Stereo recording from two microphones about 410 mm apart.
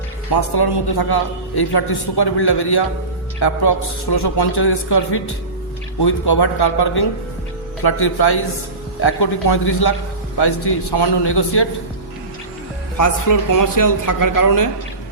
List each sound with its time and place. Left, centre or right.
0.3 s a man's voice: left
13.0 s a man's voice: left